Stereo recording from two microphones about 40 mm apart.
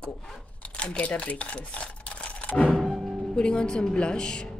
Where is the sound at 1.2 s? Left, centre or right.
Left.